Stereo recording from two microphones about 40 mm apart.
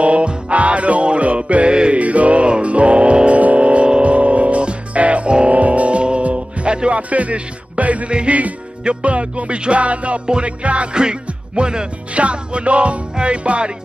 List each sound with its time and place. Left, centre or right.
0.0 s music: right
2.0 s music: right
8.1 s music: right
10.2 s music: right
10.6 s music: right